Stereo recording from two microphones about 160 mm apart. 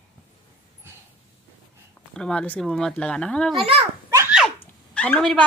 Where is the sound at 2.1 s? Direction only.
5° left (ahead or behind).